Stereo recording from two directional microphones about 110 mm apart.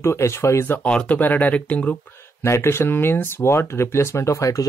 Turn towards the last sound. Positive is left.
turn(degrees=30)  # may be behind; listen again after turning